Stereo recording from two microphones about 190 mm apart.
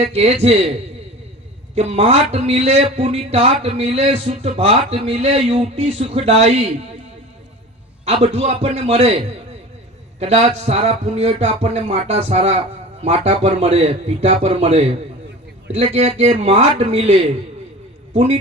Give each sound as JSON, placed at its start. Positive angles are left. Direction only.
{"t": 0.0, "sound": "a man's voice", "side_deg": -35}
{"t": 1.7, "sound": "a man's voice", "side_deg": -35}
{"t": 8.0, "sound": "a man's voice", "side_deg": -35}